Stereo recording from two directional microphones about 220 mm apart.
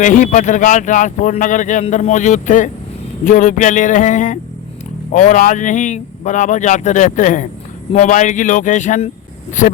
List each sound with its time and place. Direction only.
0.0 s speech: 35° left (ahead or behind)